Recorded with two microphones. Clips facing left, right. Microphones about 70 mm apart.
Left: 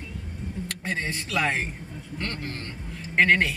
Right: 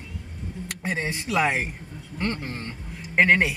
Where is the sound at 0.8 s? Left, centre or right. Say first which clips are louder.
Right 3 dB; centre.